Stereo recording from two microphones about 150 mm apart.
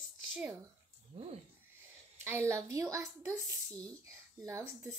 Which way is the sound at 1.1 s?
45° right (ahead or behind).